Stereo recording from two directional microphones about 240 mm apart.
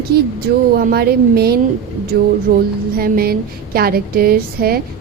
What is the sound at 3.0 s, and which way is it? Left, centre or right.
A woman's voice, right.